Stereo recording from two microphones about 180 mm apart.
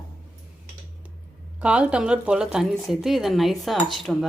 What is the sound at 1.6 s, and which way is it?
Speech, 5° right (ahead or behind).